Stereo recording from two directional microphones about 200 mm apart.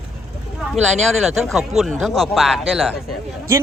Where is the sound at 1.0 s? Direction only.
Centre (ahead or behind).